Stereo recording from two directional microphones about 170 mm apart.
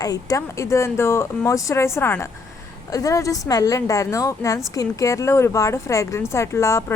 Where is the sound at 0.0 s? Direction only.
20° left (ahead or behind).